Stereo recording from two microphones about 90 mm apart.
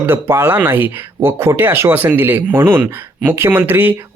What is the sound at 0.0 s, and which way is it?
Speech, 25° right (ahead or behind).